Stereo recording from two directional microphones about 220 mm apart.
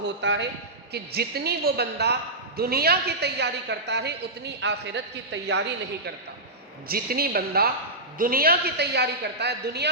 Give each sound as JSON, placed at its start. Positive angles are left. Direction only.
{"t": 0.0, "sound": "a man's voice", "side_deg": -55}
{"t": 6.8, "sound": "a woman's voice", "side_deg": -45}